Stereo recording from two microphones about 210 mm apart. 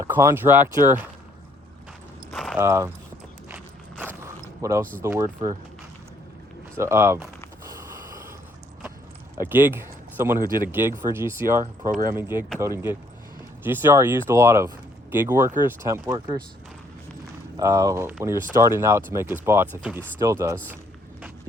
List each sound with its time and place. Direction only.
0.0 s speech: 15° right (ahead or behind)
2.3 s a sound: centre (ahead or behind)
2.6 s speech: 10° right (ahead or behind)
4.0 s zipper: 10° right (ahead or behind)
5.0 s speech: 15° right (ahead or behind)
6.7 s a sound: 10° right (ahead or behind)
9.4 s speech: 10° right (ahead or behind)
17.6 s speech: 15° right (ahead or behind)